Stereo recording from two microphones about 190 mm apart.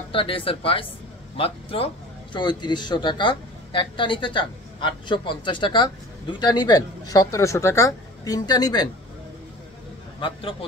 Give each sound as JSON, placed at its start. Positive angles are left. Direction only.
{"t": 0.1, "sound": "speech", "side_deg": 30}